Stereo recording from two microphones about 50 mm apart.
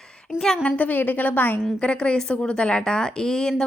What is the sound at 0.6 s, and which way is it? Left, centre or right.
A woman's voice, left.